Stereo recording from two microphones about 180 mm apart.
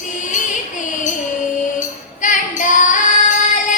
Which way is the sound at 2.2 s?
45° left (ahead or behind).